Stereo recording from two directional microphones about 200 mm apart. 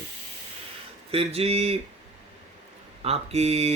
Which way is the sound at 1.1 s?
30° right (ahead or behind).